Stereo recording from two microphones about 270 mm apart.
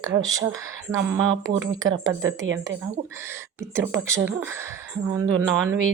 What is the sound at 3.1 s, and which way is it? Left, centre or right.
Speech, centre.